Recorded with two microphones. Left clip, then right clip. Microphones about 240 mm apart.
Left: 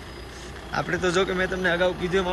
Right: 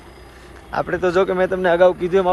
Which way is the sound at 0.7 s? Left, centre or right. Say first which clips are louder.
Right 6 dB; centre.